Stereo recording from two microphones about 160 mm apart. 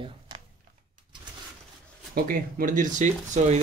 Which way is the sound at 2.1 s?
60° right (ahead or behind).